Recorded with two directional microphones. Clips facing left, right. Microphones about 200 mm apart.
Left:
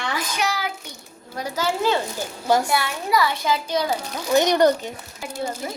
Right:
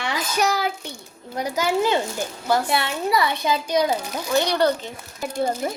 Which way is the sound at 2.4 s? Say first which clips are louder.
Left 2 dB; 15° left (ahead or behind).